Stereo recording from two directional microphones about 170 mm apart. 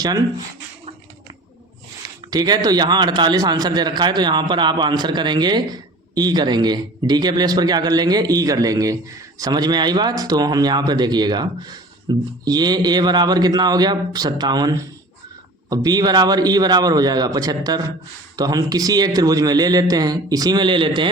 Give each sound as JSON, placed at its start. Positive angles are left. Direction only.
{"t": 2.3, "sound": "a man's voice", "side_deg": -25}